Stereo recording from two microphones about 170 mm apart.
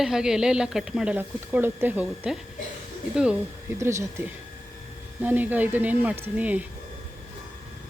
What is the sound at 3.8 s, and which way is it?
Speech, 15° right (ahead or behind).